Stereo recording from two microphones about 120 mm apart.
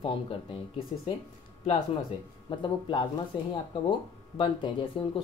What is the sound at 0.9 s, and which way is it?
Speech, 55° left (ahead or behind).